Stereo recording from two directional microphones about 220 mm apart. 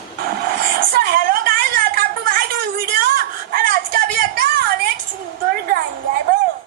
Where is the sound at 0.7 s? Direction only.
40° right (ahead or behind).